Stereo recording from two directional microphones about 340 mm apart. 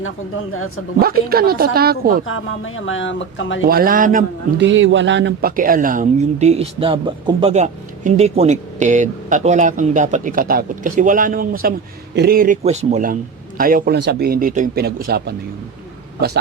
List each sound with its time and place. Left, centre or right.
1.0 s a man's voice: right
2.2 s speech: left
3.7 s a man's voice: right